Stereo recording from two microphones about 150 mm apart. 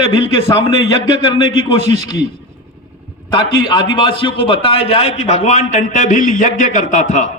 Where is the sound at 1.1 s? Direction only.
45° right (ahead or behind).